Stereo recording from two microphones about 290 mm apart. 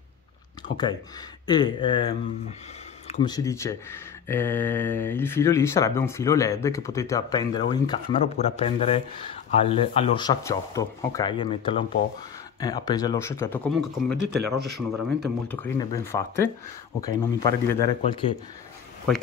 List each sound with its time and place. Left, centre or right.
0.6 s a sound: left
1.5 s speech: centre
15.4 s speech: centre